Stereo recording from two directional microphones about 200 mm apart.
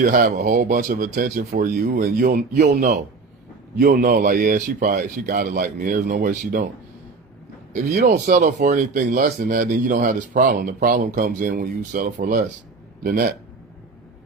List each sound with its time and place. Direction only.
0.0 s speech: 45° right (ahead or behind)
3.8 s speech: 45° right (ahead or behind)
7.7 s speech: 40° right (ahead or behind)